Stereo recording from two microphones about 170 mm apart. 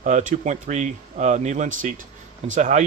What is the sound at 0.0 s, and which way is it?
A man's voice, 45° right (ahead or behind).